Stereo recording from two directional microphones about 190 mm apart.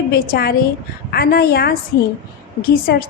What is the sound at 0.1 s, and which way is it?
A woman's voice, 55° left (ahead or behind).